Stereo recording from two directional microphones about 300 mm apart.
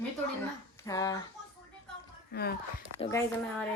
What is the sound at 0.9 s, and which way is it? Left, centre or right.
Speech, centre.